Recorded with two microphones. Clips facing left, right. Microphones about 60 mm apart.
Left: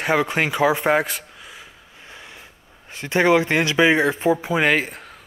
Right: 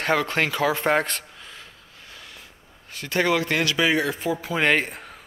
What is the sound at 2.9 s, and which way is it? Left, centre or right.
Speech, left.